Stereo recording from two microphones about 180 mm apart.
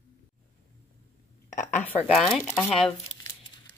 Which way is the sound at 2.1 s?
Centre (ahead or behind).